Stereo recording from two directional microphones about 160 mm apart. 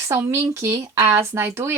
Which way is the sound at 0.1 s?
15° right (ahead or behind).